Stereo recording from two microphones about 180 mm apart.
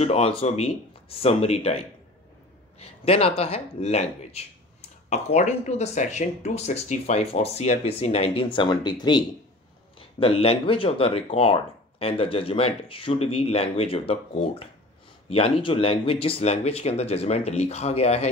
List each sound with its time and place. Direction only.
0.0 s speech: 35° left (ahead or behind)